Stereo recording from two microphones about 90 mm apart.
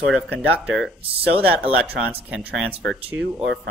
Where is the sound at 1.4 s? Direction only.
15° right (ahead or behind).